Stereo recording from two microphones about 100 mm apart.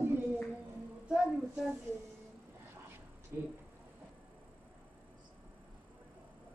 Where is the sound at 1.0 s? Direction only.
5° right (ahead or behind).